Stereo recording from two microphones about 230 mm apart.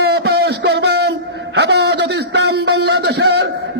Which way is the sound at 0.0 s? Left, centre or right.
Right.